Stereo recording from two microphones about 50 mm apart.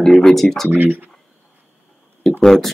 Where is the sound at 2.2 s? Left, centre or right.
Centre.